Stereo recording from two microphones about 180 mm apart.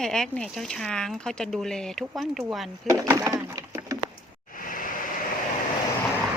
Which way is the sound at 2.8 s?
15° right (ahead or behind).